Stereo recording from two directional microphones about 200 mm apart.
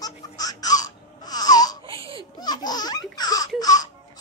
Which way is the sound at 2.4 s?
20° left (ahead or behind).